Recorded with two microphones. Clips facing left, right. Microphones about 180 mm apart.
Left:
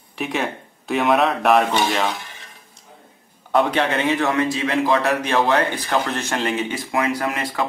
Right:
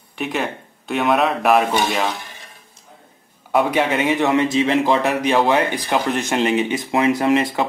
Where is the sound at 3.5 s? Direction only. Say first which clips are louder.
Right 1 dB; 10° right (ahead or behind).